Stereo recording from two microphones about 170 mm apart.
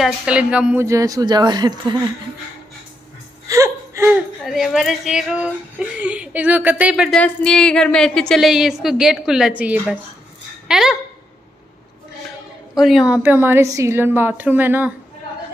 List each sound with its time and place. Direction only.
0.0 s speech: 5° right (ahead or behind)
0.8 s speech: 20° right (ahead or behind)
3.4 s whimper: 15° right (ahead or behind)
4.5 s speech: centre (ahead or behind)
7.2 s a woman's voice: 5° left (ahead or behind)
12.7 s speech: centre (ahead or behind)